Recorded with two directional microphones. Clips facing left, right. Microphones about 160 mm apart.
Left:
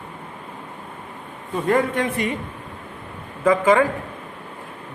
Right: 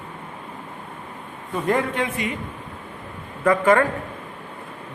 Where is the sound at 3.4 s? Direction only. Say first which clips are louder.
Left 1 dB; 15° left (ahead or behind).